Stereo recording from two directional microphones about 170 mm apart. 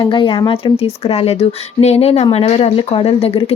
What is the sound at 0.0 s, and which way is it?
Speech, 30° left (ahead or behind).